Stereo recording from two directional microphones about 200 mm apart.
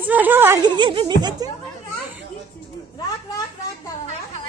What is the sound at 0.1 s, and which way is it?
Speech, 10° right (ahead or behind).